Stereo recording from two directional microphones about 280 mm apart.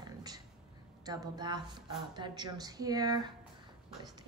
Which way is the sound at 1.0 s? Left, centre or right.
Centre.